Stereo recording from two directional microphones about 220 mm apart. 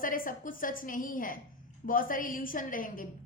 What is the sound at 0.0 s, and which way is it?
A woman's voice, 40° left (ahead or behind).